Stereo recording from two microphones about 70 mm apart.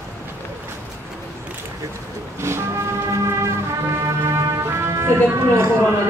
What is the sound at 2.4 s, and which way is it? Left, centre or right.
Vehicle, right.